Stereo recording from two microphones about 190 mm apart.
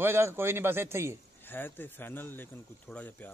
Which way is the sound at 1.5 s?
10° left (ahead or behind).